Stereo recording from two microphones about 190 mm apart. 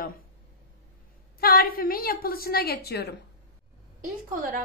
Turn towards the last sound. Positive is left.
turn(degrees=-50)  # may be behind; listen again after turning